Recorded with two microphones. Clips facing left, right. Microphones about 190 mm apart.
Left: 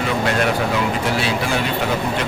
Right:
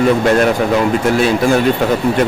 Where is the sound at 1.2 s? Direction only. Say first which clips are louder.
Right 9 dB; 45° right (ahead or behind).